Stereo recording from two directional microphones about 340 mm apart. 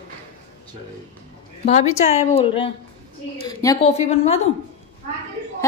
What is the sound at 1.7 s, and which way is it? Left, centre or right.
A woman's voice, centre.